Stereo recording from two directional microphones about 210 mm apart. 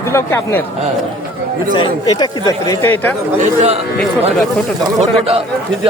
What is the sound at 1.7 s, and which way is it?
Speech, 20° left (ahead or behind).